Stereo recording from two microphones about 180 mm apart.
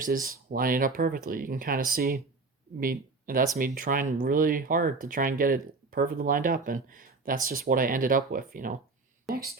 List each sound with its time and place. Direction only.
0.0 s speech: 50° right (ahead or behind)